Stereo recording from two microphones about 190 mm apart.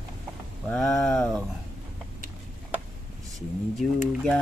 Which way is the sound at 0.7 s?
Centre (ahead or behind).